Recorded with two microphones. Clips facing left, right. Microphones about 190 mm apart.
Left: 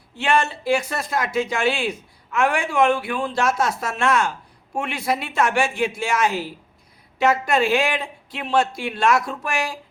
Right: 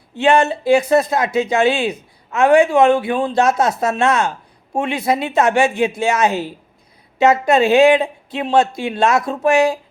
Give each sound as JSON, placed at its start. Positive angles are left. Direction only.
{"t": 0.2, "sound": "speech", "side_deg": -20}